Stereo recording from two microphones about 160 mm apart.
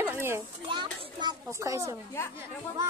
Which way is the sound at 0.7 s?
30° right (ahead or behind).